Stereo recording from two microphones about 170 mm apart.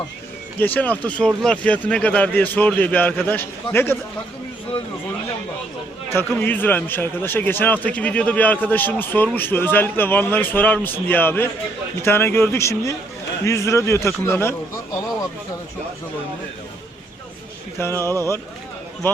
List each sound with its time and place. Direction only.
0.6 s a man's voice: 10° left (ahead or behind)
6.1 s a man's voice: 10° left (ahead or behind)
17.7 s a man's voice: 15° left (ahead or behind)